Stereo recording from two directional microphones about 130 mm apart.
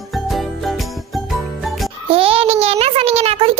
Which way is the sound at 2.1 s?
45° right (ahead or behind).